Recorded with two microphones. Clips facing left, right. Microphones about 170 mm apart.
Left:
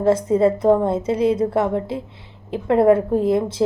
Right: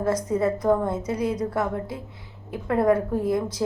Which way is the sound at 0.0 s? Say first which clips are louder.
Left 7 dB; 25° left (ahead or behind).